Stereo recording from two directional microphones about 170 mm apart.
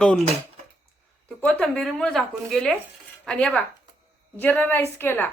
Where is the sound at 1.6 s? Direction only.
Centre (ahead or behind).